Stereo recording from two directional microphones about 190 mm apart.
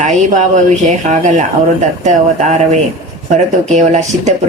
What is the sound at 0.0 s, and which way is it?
Speech, 40° right (ahead or behind).